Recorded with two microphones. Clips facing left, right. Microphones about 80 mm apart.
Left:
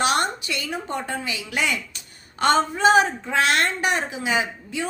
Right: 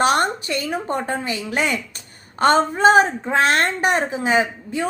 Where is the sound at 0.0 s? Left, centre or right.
Right.